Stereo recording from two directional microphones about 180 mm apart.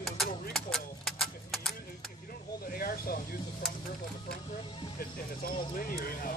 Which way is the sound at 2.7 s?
55° left (ahead or behind).